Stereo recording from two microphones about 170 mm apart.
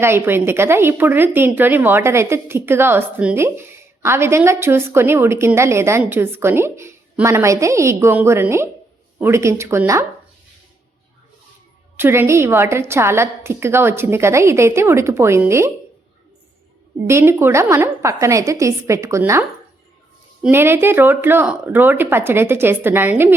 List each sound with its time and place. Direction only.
0.0 s a woman's voice: 15° right (ahead or behind)
11.9 s a woman's voice: 15° right (ahead or behind)
17.1 s a woman's voice: 15° right (ahead or behind)